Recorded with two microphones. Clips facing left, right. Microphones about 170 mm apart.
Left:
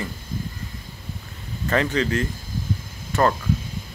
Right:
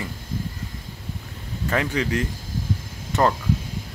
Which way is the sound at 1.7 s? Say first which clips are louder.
Left 2 dB; 10° right (ahead or behind).